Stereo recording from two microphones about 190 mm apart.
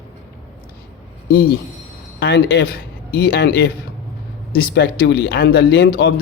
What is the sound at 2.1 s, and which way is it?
Speech, 60° left (ahead or behind).